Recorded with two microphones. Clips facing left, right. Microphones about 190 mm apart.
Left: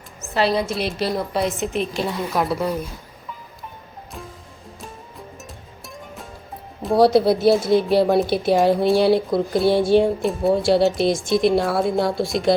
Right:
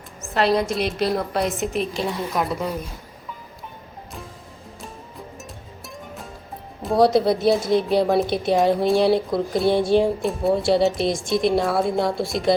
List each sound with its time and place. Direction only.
0.3 s a woman's voice: centre (ahead or behind)
5.4 s music: centre (ahead or behind)
6.8 s a woman's voice: centre (ahead or behind)